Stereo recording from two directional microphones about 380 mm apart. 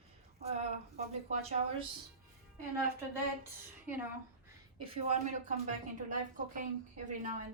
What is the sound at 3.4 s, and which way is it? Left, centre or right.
Speech, centre.